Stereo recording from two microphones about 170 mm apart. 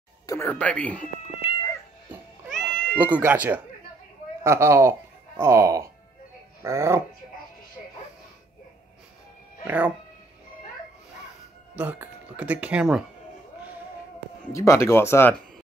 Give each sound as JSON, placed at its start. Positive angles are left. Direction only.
{"t": 0.3, "sound": "speech", "side_deg": 10}
{"t": 1.4, "sound": "cat", "side_deg": 35}
{"t": 2.5, "sound": "cat", "side_deg": 5}
{"t": 3.0, "sound": "speech", "side_deg": -10}
{"t": 9.7, "sound": "speech", "side_deg": -10}
{"t": 11.7, "sound": "speech", "side_deg": -10}
{"t": 14.5, "sound": "speech", "side_deg": 15}